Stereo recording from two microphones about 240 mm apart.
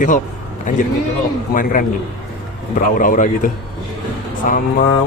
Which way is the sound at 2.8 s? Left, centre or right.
Left.